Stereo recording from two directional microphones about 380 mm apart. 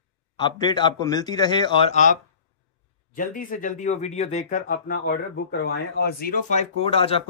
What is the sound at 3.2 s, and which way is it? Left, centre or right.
A man's voice, left.